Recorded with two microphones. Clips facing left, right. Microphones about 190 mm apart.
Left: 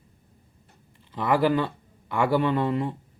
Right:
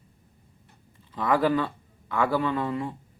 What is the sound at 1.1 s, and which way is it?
Speech, 10° left (ahead or behind).